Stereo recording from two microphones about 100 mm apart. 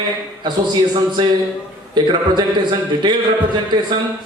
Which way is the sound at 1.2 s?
45° right (ahead or behind).